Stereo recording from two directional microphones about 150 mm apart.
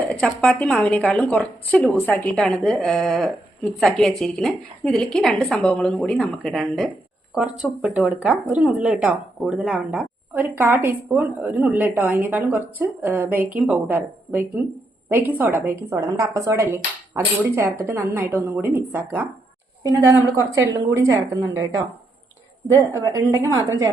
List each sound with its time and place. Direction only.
0.1 s a woman's voice: 5° left (ahead or behind); by 23.9 s 25° right (ahead or behind)